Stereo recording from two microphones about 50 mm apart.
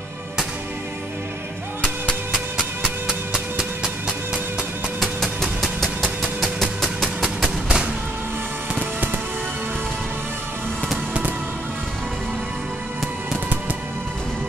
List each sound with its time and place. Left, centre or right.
3.1 s music: centre
5.0 s music: centre
7.2 s a sound: right